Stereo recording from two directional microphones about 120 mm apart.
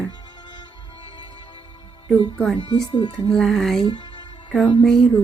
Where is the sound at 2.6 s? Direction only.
35° left (ahead or behind).